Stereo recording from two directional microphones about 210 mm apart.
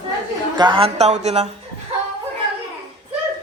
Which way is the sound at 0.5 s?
25° right (ahead or behind).